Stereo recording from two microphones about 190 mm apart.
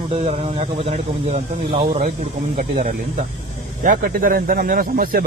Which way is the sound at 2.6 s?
40° right (ahead or behind).